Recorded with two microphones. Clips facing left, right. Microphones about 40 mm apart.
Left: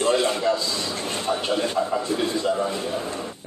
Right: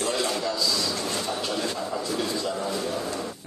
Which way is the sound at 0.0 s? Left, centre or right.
Left.